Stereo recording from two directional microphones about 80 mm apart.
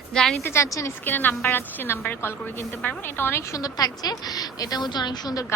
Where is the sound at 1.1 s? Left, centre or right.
Left.